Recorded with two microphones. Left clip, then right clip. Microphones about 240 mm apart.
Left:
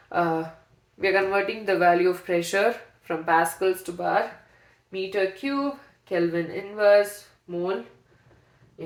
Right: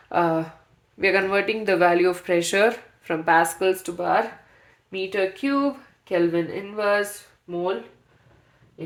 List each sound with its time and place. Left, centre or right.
0.1 s speech: right